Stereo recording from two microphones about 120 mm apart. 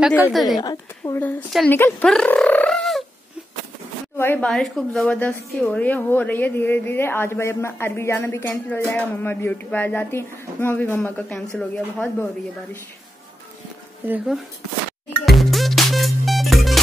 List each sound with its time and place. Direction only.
0.3 s a woman's voice: centre (ahead or behind)
0.6 s a woman's voice: 35° left (ahead or behind)
1.7 s a woman's voice: 15° left (ahead or behind)
2.0 s a sound: 5° left (ahead or behind)
4.2 s a woman's voice: 20° left (ahead or behind)
4.5 s a woman's voice: 5° left (ahead or behind)
14.0 s speech: 15° right (ahead or behind)
15.2 s music: centre (ahead or behind)